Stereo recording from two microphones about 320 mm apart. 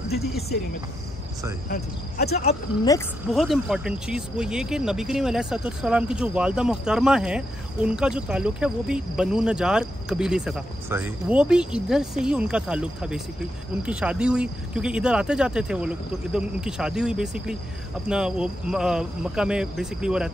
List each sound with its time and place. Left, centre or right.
1.7 s speech: left
3.3 s speech: centre